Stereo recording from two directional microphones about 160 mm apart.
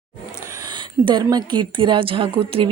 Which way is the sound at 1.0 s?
25° right (ahead or behind).